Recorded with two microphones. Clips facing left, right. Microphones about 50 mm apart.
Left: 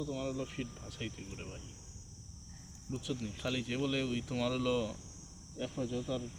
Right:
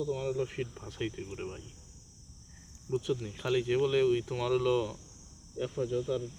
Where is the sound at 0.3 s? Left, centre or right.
Right.